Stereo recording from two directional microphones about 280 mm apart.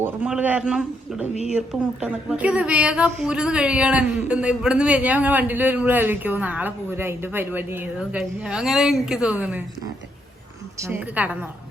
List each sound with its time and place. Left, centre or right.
0.0 s a man's voice: centre
10.8 s a woman's voice: centre